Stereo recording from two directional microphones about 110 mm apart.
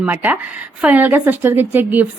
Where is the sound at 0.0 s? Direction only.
15° right (ahead or behind).